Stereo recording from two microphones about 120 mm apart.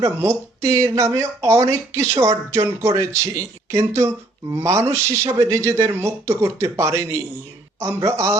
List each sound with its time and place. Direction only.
0.0 s speech: 25° right (ahead or behind)